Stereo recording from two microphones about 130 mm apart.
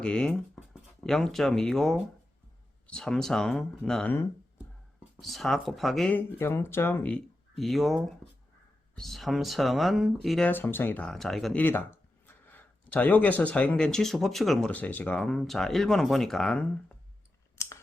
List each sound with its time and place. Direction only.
0.0 s speech: 5° left (ahead or behind)
5.2 s speech: centre (ahead or behind)
6.1 s speech: 15° left (ahead or behind)
7.5 s speech: centre (ahead or behind)
10.5 s speech: 15° left (ahead or behind)
11.6 s speech: 15° left (ahead or behind)